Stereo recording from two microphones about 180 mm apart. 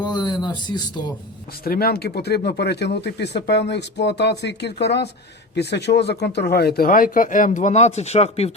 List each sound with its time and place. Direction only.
0.0 s speech: 25° left (ahead or behind)
1.6 s speech: 55° left (ahead or behind); by 8.5 s 35° left (ahead or behind)